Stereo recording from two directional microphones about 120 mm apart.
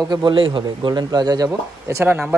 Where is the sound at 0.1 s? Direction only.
40° right (ahead or behind).